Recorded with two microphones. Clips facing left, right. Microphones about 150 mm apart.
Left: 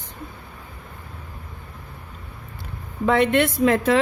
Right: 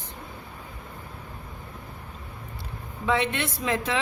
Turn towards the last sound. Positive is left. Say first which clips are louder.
# left 9 dB
turn(degrees=50)  # may be behind; listen again after turning